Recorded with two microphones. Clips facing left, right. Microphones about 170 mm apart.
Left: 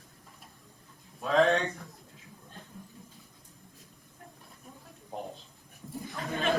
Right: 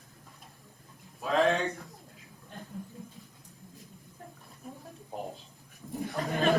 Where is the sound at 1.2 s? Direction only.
Centre (ahead or behind).